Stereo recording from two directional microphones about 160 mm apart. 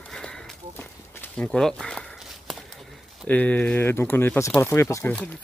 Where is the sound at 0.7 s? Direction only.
10° left (ahead or behind).